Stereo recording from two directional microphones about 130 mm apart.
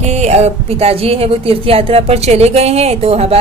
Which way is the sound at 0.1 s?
60° right (ahead or behind).